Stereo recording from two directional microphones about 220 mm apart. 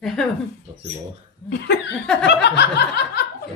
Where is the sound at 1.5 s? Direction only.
50° left (ahead or behind).